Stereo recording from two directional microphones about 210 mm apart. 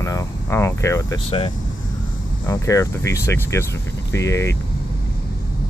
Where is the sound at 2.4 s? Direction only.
15° left (ahead or behind).